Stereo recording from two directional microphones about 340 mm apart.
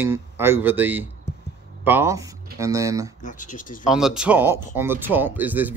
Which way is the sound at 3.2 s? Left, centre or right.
Left.